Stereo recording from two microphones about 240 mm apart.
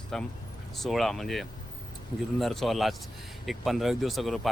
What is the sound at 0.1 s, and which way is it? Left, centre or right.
Speech, centre.